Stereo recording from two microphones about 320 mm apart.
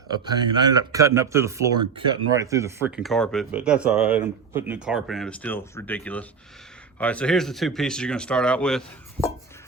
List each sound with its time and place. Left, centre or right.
0.1 s speech: centre